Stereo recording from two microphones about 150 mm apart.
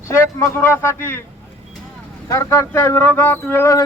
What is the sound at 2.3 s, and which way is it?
Speech, 20° left (ahead or behind).